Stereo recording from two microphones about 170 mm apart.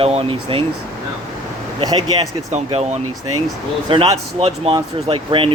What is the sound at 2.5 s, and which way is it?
Speech, 40° right (ahead or behind).